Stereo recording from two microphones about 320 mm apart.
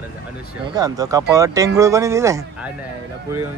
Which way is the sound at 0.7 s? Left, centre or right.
Centre.